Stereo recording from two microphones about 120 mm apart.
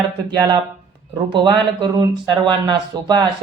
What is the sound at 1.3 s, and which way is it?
Speech, 40° right (ahead or behind).